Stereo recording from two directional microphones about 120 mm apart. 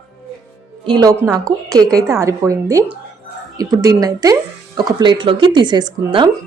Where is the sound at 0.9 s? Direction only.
35° right (ahead or behind).